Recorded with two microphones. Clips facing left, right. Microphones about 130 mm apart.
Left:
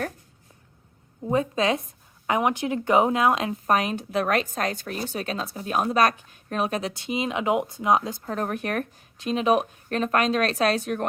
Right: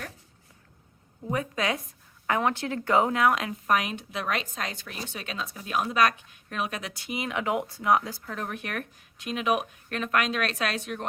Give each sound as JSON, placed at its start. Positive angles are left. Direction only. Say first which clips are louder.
{"t": 1.2, "sound": "speech", "louder": "left 6 dB", "side_deg": 25}
{"t": 3.7, "sound": "a woman's voice", "louder": "left 3 dB", "side_deg": 35}
{"t": 8.2, "sound": "a woman's voice", "louder": "left 7 dB", "side_deg": 40}